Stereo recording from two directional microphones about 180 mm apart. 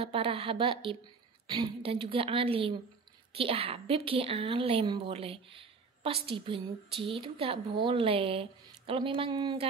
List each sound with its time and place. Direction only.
0.0 s a woman's voice: 30° right (ahead or behind)